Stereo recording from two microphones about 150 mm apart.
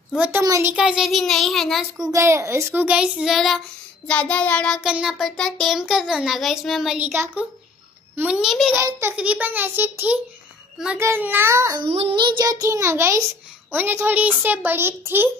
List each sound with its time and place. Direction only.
0.4 s a child's voice: 20° right (ahead or behind)
0.7 s a child's voice: 5° right (ahead or behind)
2.0 s a child's voice: 20° right (ahead or behind); by 3.6 s centre (ahead or behind)
4.1 s child singing: 10° left (ahead or behind)
4.8 s a child's voice: 5° right (ahead or behind)
8.7 s a child's voice: 15° right (ahead or behind)
11.9 s a child's voice: 35° right (ahead or behind); by 15.3 s 15° right (ahead or behind)